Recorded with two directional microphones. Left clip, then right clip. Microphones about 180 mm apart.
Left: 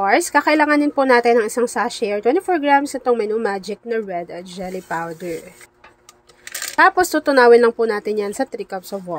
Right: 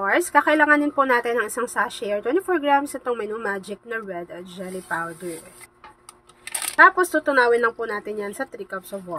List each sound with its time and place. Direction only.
0.0 s a woman's voice: 35° left (ahead or behind)
6.8 s speech: 35° left (ahead or behind)